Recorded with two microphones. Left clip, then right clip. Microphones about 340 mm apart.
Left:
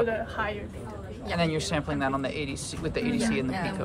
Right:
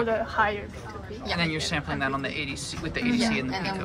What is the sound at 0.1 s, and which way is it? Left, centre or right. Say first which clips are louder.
Speech: right 6 dB; right.